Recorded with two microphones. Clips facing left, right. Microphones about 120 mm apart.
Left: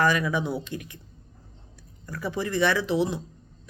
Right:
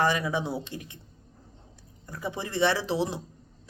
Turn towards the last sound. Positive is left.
turn(degrees=-30)  # may be behind; listen again after turning